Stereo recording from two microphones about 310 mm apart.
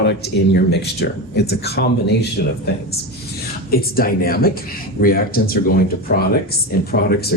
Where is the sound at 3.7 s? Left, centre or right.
Left.